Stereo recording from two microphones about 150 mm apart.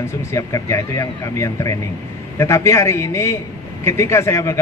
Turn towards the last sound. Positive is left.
turn(degrees=20)  # may be behind; listen again after turning